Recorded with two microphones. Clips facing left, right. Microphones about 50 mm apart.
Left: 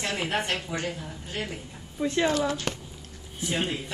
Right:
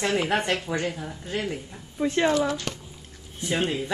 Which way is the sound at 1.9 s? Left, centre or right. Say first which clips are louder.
Right 2 dB; centre.